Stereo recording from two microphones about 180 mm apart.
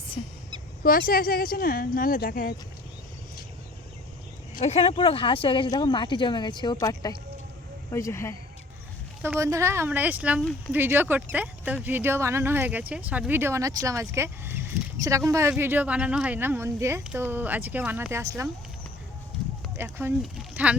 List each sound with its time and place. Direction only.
0.2 s speech: 35° left (ahead or behind)
0.8 s speech: 50° left (ahead or behind)
4.5 s speech: 35° left (ahead or behind); by 8.4 s 15° left (ahead or behind)
9.2 s speech: 15° right (ahead or behind)
19.7 s speech: 10° right (ahead or behind)